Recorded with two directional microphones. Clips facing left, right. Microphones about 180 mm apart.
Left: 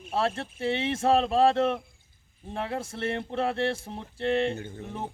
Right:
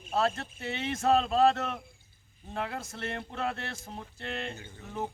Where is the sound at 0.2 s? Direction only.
30° left (ahead or behind).